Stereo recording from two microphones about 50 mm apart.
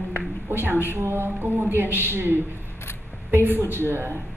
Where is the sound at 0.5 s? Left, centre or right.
Right.